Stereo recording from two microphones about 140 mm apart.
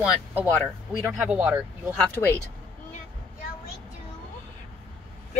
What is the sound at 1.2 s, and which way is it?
Speech, 10° right (ahead or behind).